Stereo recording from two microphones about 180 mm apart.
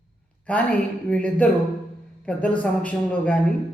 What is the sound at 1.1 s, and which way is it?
A man's voice, 5° left (ahead or behind).